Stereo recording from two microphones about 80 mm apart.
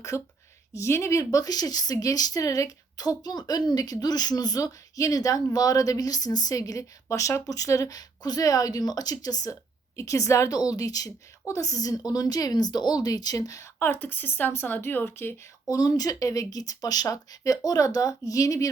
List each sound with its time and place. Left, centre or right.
0.1 s a woman's voice: left
13.7 s speech: left
15.7 s a woman's voice: left